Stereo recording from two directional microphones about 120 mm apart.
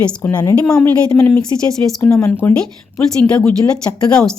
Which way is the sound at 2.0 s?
15° left (ahead or behind).